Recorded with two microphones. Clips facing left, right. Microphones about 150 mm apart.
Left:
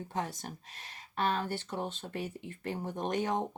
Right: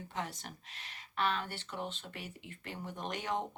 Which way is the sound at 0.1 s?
40° left (ahead or behind).